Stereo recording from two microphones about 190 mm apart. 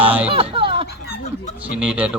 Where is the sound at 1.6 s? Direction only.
5° right (ahead or behind).